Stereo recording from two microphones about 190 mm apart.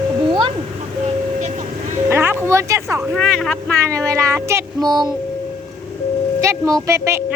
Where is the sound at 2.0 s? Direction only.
10° right (ahead or behind).